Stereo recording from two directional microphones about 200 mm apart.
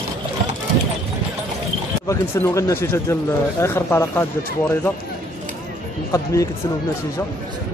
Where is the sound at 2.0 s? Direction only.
15° left (ahead or behind).